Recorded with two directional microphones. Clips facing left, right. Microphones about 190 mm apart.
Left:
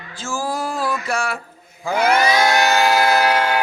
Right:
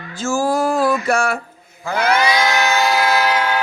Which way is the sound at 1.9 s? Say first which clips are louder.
Even; 55° left (ahead or behind).